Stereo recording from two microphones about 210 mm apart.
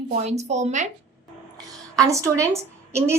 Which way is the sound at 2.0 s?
15° right (ahead or behind).